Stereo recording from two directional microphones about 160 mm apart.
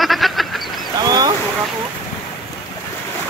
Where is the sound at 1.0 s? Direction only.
25° right (ahead or behind).